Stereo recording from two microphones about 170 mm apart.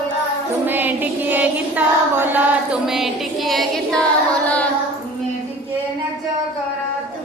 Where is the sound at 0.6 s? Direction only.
10° right (ahead or behind).